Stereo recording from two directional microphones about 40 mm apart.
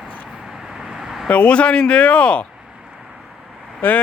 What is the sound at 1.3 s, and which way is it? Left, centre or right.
Speech, left.